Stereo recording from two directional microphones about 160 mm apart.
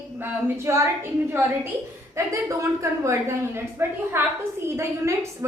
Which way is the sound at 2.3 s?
20° right (ahead or behind).